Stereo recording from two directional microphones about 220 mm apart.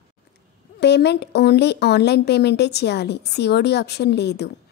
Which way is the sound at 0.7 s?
50° left (ahead or behind).